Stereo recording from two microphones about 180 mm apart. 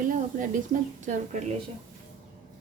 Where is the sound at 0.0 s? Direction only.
45° right (ahead or behind).